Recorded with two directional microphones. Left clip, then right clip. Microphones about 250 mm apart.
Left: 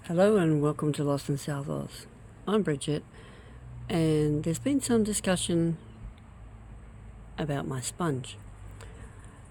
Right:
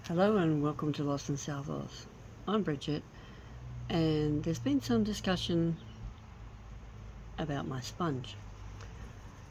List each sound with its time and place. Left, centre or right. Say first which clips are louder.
0.1 s speech: left 6 dB; left
7.3 s speech: left 5 dB; left